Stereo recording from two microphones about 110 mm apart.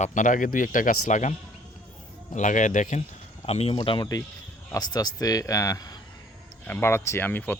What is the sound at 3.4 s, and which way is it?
Speech, 70° left (ahead or behind).